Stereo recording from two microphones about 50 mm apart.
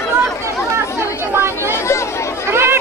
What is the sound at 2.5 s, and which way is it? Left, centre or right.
Chatter, right.